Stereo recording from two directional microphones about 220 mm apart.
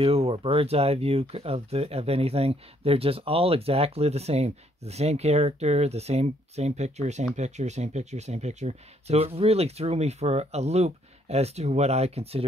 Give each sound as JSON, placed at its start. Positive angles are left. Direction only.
{"t": 0.0, "sound": "speech", "side_deg": -25}